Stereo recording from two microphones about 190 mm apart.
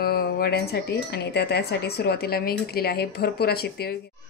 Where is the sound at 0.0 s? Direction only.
55° left (ahead or behind).